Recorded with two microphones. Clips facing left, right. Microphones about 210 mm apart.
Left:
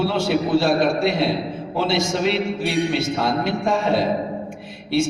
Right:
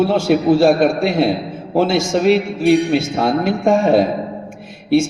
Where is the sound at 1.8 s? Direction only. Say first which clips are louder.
Right 6 dB; 50° right (ahead or behind).